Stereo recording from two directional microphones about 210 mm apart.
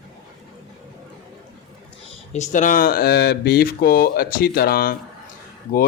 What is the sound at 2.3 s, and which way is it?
Speech, 35° left (ahead or behind).